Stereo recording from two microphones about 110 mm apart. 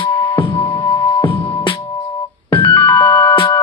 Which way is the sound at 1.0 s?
50° left (ahead or behind).